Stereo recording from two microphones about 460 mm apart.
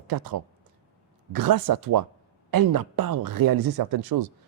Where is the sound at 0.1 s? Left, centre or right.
Right.